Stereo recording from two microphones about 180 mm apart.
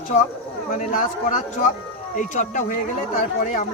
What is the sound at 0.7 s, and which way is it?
A man's voice, 45° left (ahead or behind).